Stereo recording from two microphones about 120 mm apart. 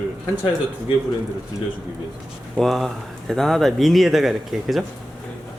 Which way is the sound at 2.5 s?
Centre (ahead or behind).